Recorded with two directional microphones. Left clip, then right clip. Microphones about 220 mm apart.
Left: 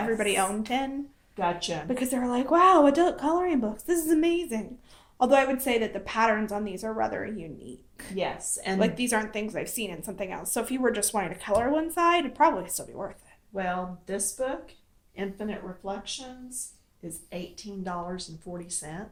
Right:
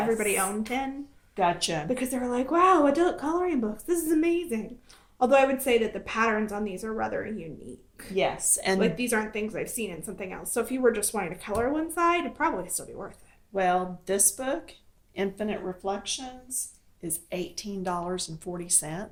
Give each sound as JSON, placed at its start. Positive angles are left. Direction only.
{"t": 0.2, "sound": "speech", "side_deg": 25}
{"t": 1.4, "sound": "speech", "side_deg": -50}
{"t": 1.9, "sound": "speech", "side_deg": 25}
{"t": 8.1, "sound": "speech", "side_deg": -50}
{"t": 8.8, "sound": "speech", "side_deg": 25}
{"t": 13.5, "sound": "speech", "side_deg": -50}
{"t": 17.2, "sound": "speech", "side_deg": -50}